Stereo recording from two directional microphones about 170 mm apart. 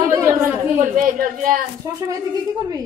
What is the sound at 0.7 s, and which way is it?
Speech, 50° right (ahead or behind).